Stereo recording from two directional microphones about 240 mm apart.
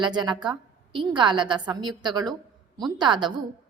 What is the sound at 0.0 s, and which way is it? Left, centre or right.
A woman's voice, centre.